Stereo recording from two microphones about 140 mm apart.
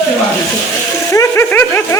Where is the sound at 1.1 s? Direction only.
20° left (ahead or behind).